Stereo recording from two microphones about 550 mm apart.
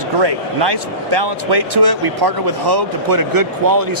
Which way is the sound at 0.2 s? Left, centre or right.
Right.